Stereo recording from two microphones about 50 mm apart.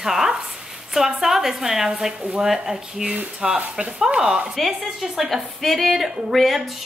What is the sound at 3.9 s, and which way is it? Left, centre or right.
Speech, centre.